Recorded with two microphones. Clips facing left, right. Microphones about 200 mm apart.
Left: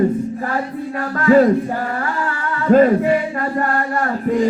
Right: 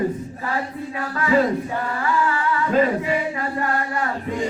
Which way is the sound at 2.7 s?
50° left (ahead or behind).